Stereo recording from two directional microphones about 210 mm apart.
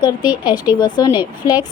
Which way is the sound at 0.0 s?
20° left (ahead or behind).